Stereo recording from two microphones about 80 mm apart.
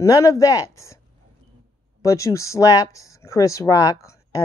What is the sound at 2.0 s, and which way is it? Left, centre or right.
A man's voice, left.